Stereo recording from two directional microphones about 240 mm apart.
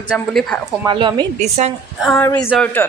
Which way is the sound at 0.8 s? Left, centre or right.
Centre.